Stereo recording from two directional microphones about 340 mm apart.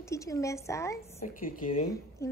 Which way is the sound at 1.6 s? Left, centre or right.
Left.